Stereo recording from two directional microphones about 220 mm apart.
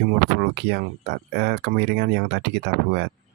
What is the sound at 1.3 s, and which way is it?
Speech, 45° right (ahead or behind).